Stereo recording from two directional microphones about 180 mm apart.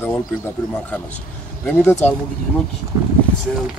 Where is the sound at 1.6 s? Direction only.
10° left (ahead or behind).